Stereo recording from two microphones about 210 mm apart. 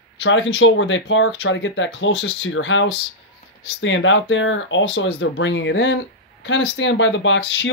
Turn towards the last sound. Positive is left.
turn(degrees=60)  # may be behind; listen again after turning